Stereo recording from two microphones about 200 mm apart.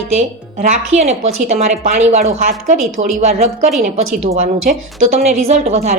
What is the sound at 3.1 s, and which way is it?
Speech, 35° right (ahead or behind).